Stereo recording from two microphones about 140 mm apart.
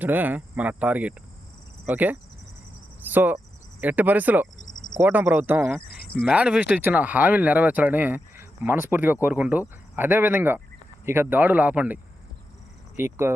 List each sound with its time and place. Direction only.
0.0 s speech: 15° right (ahead or behind)
5.9 s cricket: 90° left
6.2 s speech: 5° right (ahead or behind)
13.0 s speech: 20° right (ahead or behind)